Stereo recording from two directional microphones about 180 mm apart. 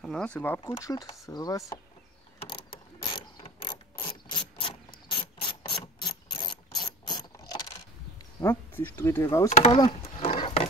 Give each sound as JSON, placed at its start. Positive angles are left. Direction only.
{"t": 0.0, "sound": "speech", "side_deg": 5}
{"t": 2.3, "sound": "mechanisms", "side_deg": 30}
{"t": 8.4, "sound": "speech", "side_deg": 10}
{"t": 9.5, "sound": "speech", "side_deg": 40}
{"t": 9.8, "sound": "a sound", "side_deg": 35}